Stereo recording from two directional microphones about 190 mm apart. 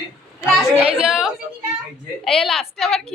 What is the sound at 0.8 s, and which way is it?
Speech, 30° right (ahead or behind).